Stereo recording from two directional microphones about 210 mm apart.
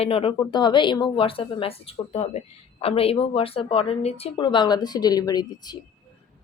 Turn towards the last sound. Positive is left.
turn(degrees=20)  # may be behind; listen again after turning